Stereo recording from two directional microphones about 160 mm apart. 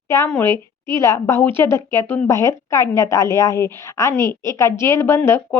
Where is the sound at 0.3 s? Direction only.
10° left (ahead or behind).